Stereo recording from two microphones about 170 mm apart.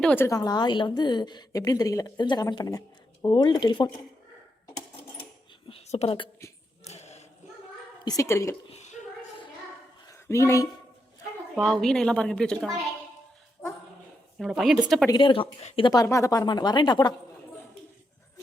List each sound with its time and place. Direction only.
0.0 s speech: 10° left (ahead or behind)
0.3 s a woman's voice: 20° left (ahead or behind)
5.6 s a sound: 35° left (ahead or behind)
8.0 s a woman's voice: 20° left (ahead or behind)
8.7 s a sound: 45° left (ahead or behind)
10.1 s a sound: 15° left (ahead or behind)
11.5 s a woman's voice: centre (ahead or behind)
14.3 s a woman's voice: centre (ahead or behind)
15.1 s a woman's voice: 30° left (ahead or behind)